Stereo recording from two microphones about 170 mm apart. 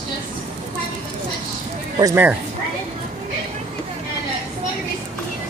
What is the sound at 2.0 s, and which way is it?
Speech, 20° right (ahead or behind).